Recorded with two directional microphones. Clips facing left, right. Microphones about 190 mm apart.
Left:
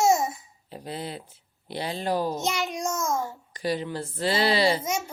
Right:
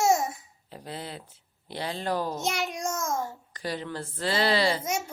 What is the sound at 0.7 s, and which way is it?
Speech, 15° left (ahead or behind).